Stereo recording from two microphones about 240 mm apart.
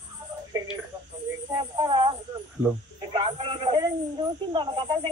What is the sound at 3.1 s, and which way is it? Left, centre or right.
Snake, right.